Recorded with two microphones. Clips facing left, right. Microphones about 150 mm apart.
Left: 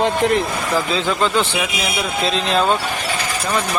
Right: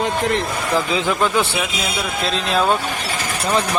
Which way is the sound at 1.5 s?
10° left (ahead or behind).